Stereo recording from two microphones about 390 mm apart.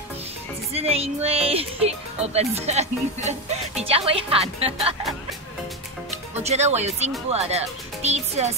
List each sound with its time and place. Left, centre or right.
0.7 s speech: centre
6.4 s speech: centre